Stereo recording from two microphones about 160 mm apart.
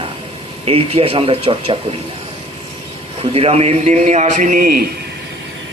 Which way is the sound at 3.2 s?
35° right (ahead or behind).